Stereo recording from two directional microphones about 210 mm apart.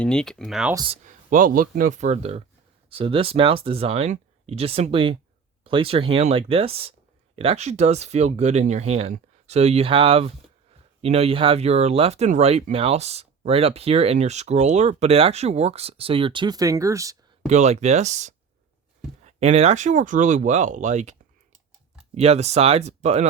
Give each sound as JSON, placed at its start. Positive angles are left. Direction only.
{"t": 0.0, "sound": "speech", "side_deg": 5}
{"t": 0.7, "sound": "speech", "side_deg": -20}
{"t": 1.0, "sound": "speech", "side_deg": -40}
{"t": 17.4, "sound": "speech", "side_deg": -30}